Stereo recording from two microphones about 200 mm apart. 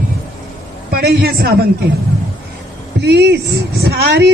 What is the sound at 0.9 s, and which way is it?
Speech, 50° right (ahead or behind).